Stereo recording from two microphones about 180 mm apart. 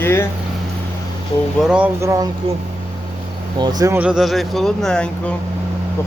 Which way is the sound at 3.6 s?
20° right (ahead or behind).